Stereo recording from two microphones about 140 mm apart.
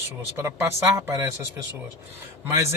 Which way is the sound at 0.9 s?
20° right (ahead or behind).